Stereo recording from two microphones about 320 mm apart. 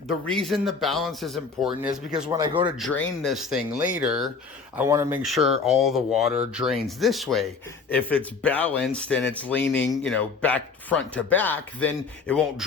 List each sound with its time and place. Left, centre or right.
0.3 s speech: centre
2.7 s speech: centre